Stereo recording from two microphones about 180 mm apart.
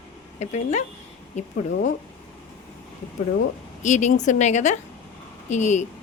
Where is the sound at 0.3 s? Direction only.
40° left (ahead or behind).